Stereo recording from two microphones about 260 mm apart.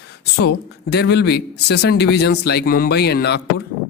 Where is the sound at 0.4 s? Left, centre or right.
Left.